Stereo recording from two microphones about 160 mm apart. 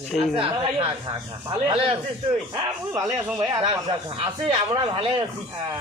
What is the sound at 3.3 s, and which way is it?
Speech, 30° right (ahead or behind).